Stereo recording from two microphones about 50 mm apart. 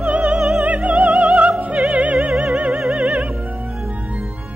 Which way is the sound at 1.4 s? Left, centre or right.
Right.